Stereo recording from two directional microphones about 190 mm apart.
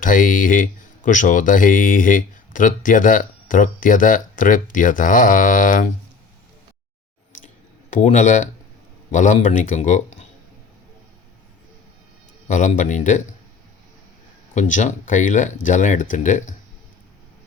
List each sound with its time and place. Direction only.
0.0 s speech: 45° left (ahead or behind)
7.4 s a sound: 40° left (ahead or behind)
9.1 s speech: 40° left (ahead or behind)
12.5 s speech: 40° left (ahead or behind)
14.5 s speech: 40° left (ahead or behind)